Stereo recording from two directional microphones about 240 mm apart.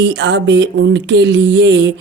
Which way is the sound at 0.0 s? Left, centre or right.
Right.